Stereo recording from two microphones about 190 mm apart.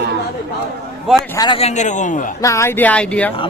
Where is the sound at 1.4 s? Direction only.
25° left (ahead or behind).